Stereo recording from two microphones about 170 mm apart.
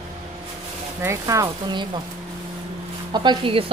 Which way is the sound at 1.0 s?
15° right (ahead or behind).